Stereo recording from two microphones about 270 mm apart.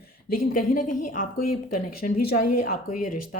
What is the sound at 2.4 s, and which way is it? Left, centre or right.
Speech, left.